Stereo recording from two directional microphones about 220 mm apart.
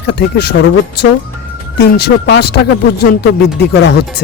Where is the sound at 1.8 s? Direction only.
50° left (ahead or behind).